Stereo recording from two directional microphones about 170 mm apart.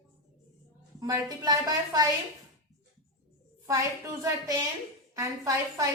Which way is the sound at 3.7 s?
20° right (ahead or behind).